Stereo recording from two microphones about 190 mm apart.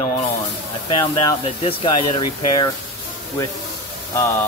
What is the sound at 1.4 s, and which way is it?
Speech, 30° left (ahead or behind).